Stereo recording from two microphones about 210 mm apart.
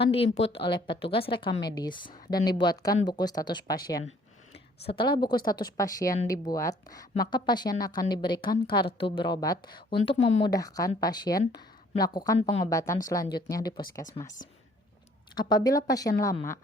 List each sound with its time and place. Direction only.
0.0 s a woman's voice: 25° left (ahead or behind)
4.9 s a woman's voice: 25° left (ahead or behind)
10.5 s speech: 15° left (ahead or behind)
12.4 s a woman's voice: 30° left (ahead or behind)
13.0 s speech: 15° left (ahead or behind)
15.4 s speech: 20° left (ahead or behind)